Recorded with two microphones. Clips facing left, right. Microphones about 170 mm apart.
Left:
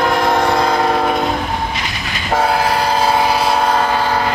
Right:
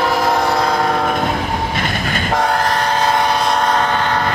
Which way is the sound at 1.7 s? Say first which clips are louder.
Right 4 dB; 50° right (ahead or behind).